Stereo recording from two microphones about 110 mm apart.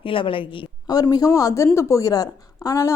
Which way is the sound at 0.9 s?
35° left (ahead or behind).